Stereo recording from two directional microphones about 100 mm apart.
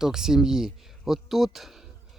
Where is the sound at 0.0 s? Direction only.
5° right (ahead or behind).